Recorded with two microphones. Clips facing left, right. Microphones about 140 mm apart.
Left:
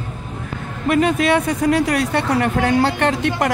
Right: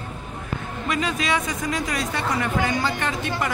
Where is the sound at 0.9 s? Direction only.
55° left (ahead or behind).